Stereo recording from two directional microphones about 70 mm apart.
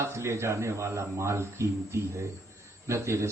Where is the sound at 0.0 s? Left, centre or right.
Right.